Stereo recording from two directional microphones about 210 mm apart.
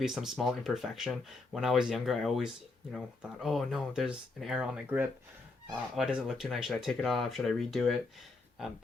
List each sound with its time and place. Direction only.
0.0 s speech: centre (ahead or behind)